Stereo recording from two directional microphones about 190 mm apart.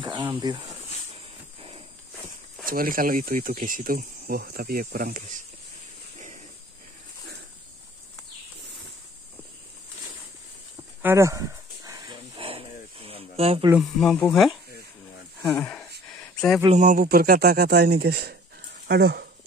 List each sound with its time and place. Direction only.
0.0 s cricket: 20° right (ahead or behind)
0.4 s speech: 20° right (ahead or behind)
2.6 s speech: 50° right (ahead or behind)
11.0 s a sound: 15° right (ahead or behind); by 13.7 s 30° right (ahead or behind)
13.7 s speech: centre (ahead or behind)
16.2 s a sound: 5° left (ahead or behind)
16.7 s speech: 45° right (ahead or behind)